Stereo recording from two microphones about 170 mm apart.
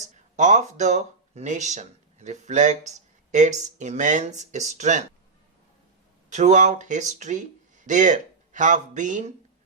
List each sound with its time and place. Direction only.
0.0 s speech: 45° right (ahead or behind)
6.3 s speech: 45° right (ahead or behind)